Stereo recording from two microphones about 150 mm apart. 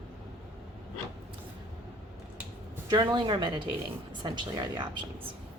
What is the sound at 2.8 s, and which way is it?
Speech, 30° right (ahead or behind).